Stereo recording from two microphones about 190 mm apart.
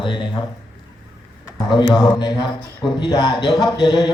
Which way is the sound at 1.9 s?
25° left (ahead or behind).